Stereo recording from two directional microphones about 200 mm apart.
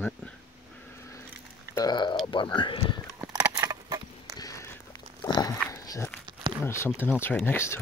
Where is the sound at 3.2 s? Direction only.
20° right (ahead or behind).